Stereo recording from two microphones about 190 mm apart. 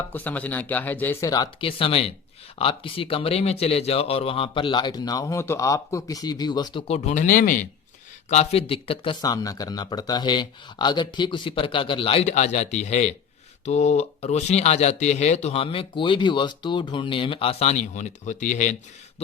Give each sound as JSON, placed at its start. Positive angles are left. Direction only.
{"t": 0.1, "sound": "speech", "side_deg": 10}
{"t": 6.8, "sound": "speech", "side_deg": 35}